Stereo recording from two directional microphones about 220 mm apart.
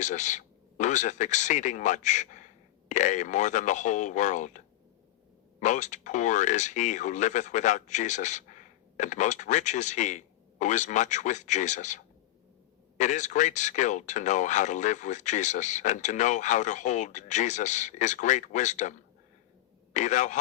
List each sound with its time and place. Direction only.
0.0 s speech: 35° left (ahead or behind)